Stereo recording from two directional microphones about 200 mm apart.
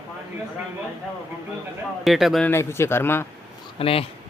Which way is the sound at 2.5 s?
15° left (ahead or behind).